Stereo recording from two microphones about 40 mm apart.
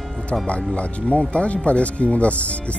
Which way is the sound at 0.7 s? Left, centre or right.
Left.